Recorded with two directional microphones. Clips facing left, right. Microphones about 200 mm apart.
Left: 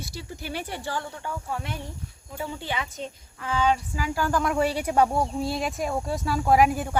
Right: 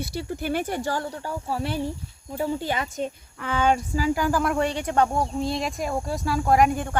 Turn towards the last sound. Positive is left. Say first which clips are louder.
# even
turn(degrees=5)  # may be behind; listen again after turning